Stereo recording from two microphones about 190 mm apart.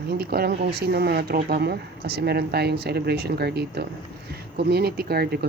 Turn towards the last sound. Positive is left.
turn(degrees=-55)  # may be behind; listen again after turning